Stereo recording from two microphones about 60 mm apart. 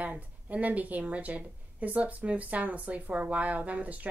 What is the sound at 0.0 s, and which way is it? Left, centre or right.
A woman's voice, right.